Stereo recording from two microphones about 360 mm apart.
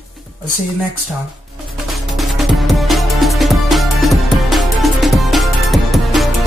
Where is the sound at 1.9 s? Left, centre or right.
Centre.